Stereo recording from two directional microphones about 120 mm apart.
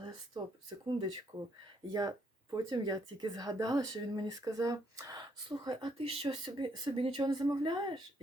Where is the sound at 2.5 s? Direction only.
35° right (ahead or behind).